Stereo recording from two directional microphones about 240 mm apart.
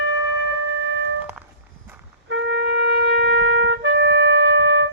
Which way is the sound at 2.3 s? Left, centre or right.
Right.